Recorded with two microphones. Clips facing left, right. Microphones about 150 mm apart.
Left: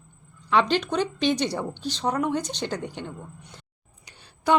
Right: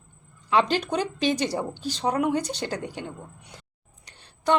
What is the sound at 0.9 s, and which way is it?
Speech, 40° right (ahead or behind).